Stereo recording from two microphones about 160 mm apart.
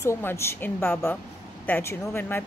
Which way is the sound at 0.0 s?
15° left (ahead or behind).